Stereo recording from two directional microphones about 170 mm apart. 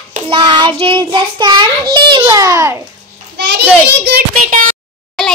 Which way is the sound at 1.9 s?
25° right (ahead or behind).